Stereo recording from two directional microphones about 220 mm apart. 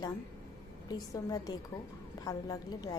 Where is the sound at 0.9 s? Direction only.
15° left (ahead or behind).